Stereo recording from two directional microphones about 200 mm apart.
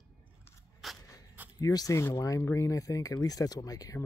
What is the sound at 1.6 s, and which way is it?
Speech, 15° left (ahead or behind).